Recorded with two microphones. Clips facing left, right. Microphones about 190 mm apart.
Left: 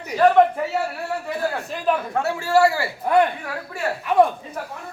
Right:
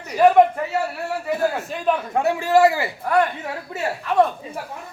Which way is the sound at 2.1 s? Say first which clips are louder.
Right 4 dB; 15° right (ahead or behind).